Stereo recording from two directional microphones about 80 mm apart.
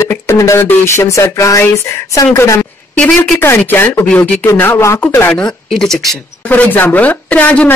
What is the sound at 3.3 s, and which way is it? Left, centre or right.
A woman's voice, left.